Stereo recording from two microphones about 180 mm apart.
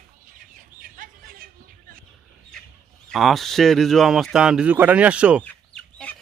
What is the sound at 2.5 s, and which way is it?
Fowl, 5° left (ahead or behind).